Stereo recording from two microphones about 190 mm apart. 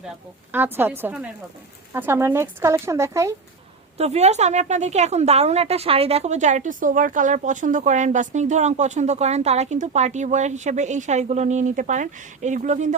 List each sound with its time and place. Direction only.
0.5 s speech: 10° right (ahead or behind)
3.9 s a woman's voice: 35° right (ahead or behind)